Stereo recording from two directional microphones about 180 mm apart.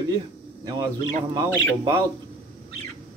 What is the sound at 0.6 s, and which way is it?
A man's voice, 20° right (ahead or behind).